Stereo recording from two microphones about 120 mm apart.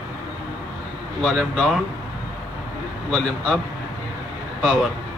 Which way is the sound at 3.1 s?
Centre (ahead or behind).